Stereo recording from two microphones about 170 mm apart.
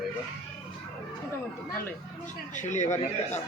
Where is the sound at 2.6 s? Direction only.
45° left (ahead or behind).